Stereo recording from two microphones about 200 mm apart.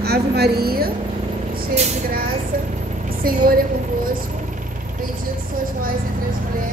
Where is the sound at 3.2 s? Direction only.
45° right (ahead or behind).